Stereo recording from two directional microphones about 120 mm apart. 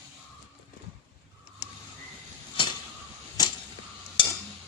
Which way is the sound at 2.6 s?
45° left (ahead or behind).